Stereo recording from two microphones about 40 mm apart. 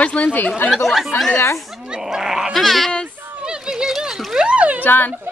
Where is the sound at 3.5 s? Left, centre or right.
Centre.